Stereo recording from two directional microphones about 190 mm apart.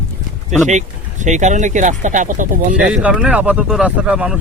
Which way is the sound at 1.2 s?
40° right (ahead or behind).